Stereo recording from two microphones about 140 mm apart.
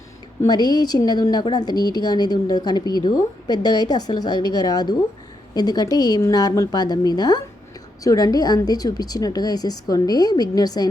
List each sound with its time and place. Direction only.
0.4 s a woman's voice: 30° left (ahead or behind)